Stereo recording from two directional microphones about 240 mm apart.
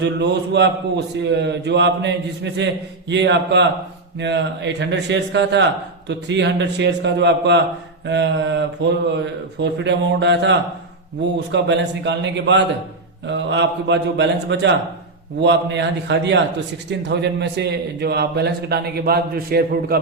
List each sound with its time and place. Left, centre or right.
0.0 s a man's voice: right